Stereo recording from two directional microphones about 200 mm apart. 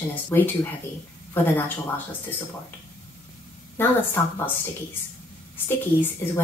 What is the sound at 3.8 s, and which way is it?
Speech, 10° left (ahead or behind).